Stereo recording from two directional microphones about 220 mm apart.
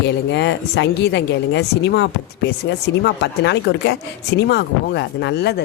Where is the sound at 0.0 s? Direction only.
50° left (ahead or behind).